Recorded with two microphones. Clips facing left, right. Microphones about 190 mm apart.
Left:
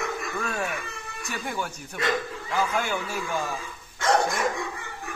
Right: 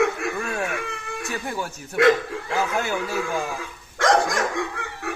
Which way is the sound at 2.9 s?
70° right (ahead or behind).